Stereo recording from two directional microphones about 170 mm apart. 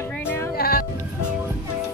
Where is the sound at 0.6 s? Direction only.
60° left (ahead or behind).